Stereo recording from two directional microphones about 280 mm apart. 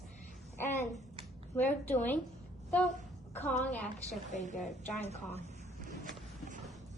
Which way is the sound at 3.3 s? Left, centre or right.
Centre.